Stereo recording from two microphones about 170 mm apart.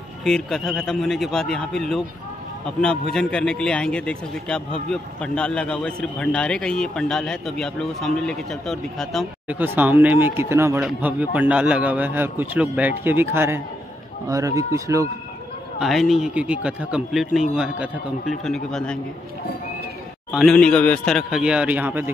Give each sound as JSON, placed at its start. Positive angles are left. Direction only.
{"t": 0.2, "sound": "a man's voice", "side_deg": 5}
{"t": 9.6, "sound": "a man's voice", "side_deg": -10}
{"t": 15.8, "sound": "a man's voice", "side_deg": 0}
{"t": 20.2, "sound": "a man's voice", "side_deg": 0}